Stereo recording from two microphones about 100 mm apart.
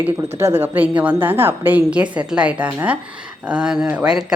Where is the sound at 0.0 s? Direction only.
25° right (ahead or behind).